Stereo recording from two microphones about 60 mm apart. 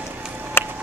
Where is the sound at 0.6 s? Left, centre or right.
Left.